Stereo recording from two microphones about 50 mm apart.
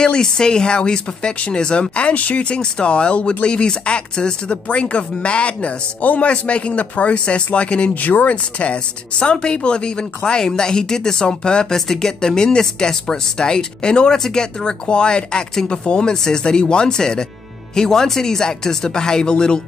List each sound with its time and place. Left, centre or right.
0.0 s speech: centre
7.9 s speech: left; by 19.6 s centre